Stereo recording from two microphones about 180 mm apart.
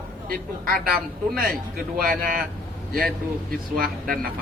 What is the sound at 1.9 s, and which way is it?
Speech, 55° right (ahead or behind).